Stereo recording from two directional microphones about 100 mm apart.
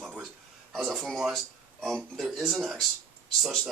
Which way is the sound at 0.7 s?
Centre (ahead or behind).